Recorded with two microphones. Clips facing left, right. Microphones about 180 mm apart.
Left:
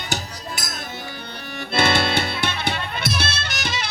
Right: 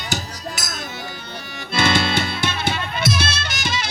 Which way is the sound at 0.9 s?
55° left (ahead or behind).